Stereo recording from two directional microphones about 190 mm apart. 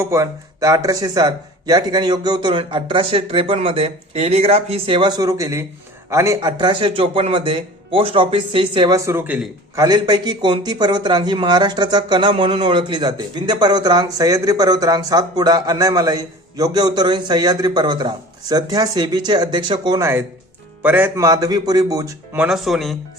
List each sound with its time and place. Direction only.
0.0 s speech: 15° right (ahead or behind)
9.0 s speech: 10° right (ahead or behind)
9.8 s speech: 20° right (ahead or behind)
22.4 s speech: centre (ahead or behind)